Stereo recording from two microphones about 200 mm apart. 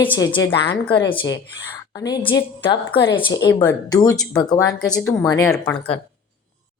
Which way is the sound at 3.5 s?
10° left (ahead or behind).